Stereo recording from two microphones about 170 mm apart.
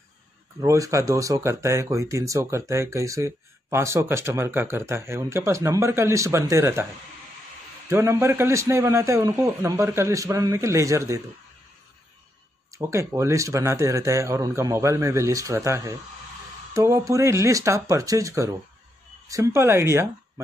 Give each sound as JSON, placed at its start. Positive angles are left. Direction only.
{"t": 0.6, "sound": "speech", "side_deg": -20}
{"t": 7.9, "sound": "speech", "side_deg": -15}
{"t": 12.7, "sound": "speech", "side_deg": -15}